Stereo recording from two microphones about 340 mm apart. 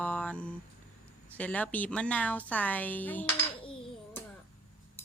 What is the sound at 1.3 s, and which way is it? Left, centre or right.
A woman's voice, centre.